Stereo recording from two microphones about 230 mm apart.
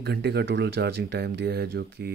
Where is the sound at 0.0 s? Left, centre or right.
Right.